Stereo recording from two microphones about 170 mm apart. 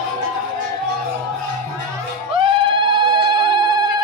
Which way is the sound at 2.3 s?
30° right (ahead or behind).